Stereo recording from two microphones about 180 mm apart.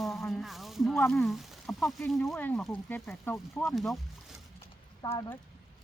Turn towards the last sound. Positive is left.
turn(degrees=15)  # may be behind; listen again after turning